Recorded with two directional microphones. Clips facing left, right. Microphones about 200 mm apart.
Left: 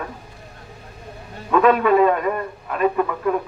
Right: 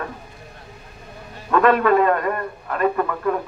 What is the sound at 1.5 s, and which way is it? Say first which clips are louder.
A man's voice: left 1 dB; 5° left (ahead or behind).